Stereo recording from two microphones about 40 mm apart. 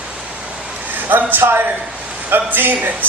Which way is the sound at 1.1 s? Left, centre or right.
Right.